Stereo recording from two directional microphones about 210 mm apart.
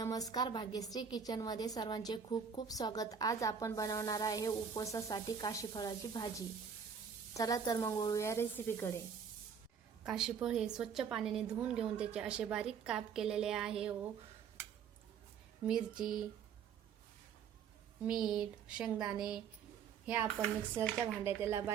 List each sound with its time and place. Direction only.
0.0 s a woman's voice: 15° left (ahead or behind)
10.1 s a woman's voice: 5° right (ahead or behind)
15.6 s a woman's voice: 5° right (ahead or behind)
18.0 s a woman's voice: 5° right (ahead or behind)